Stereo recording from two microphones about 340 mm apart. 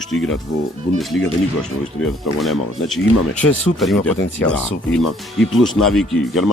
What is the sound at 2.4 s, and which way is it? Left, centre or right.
Speech, centre.